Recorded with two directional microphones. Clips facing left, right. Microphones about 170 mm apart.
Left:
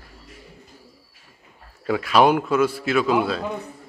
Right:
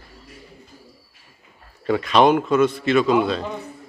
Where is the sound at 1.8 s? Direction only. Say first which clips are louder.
Right 1 dB; 5° left (ahead or behind).